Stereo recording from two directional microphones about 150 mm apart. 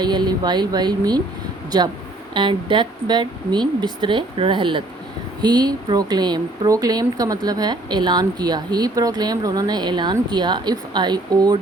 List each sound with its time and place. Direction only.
0.0 s a woman's voice: 30° right (ahead or behind)